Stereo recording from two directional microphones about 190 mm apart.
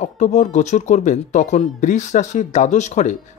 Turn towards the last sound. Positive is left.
turn(degrees=40)  # may be behind; listen again after turning